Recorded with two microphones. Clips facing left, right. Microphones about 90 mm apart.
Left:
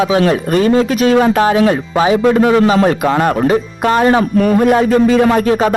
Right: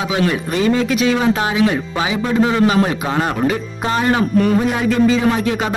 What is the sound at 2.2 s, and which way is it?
Speech, 55° left (ahead or behind).